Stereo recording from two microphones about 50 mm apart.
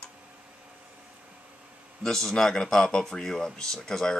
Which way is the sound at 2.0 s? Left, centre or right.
Centre.